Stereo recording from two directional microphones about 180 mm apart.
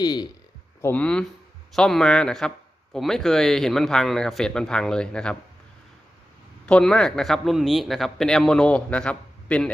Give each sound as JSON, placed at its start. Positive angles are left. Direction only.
{"t": 0.0, "sound": "speech", "side_deg": 25}
{"t": 0.8, "sound": "a man's voice", "side_deg": 10}
{"t": 6.7, "sound": "a man's voice", "side_deg": 5}